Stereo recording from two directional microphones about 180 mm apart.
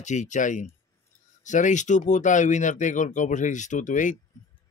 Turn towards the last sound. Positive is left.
turn(degrees=45)  # may be behind; listen again after turning